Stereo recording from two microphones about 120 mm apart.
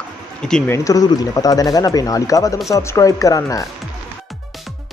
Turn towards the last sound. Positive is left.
turn(degrees=30)  # may be behind; listen again after turning